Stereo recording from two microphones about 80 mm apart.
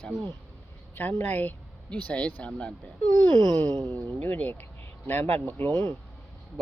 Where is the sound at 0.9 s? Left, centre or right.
Left.